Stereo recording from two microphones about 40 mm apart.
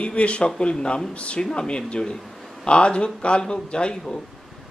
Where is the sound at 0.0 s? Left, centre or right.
Left.